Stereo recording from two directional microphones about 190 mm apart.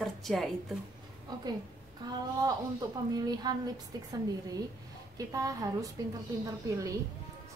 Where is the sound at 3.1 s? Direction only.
20° right (ahead or behind).